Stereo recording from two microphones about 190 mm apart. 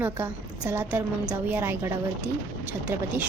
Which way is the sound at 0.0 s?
10° right (ahead or behind).